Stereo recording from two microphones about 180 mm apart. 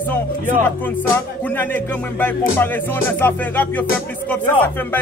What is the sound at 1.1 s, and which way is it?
Speech, 10° left (ahead or behind).